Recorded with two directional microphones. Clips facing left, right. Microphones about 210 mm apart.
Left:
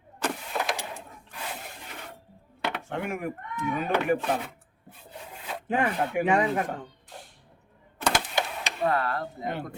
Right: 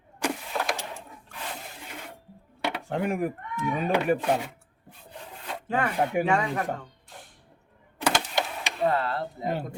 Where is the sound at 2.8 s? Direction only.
35° right (ahead or behind).